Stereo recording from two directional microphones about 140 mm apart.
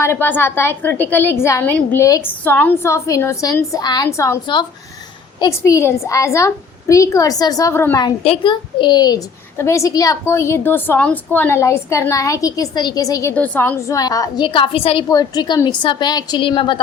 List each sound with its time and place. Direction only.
0.0 s a woman's voice: 15° left (ahead or behind)
5.4 s a woman's voice: 25° left (ahead or behind)
8.2 s a woman's voice: 40° left (ahead or behind); by 13.3 s 25° left (ahead or behind)
13.3 s a woman's voice: 10° left (ahead or behind); by 15.0 s 40° left (ahead or behind)
15.1 s a woman's voice: 30° left (ahead or behind)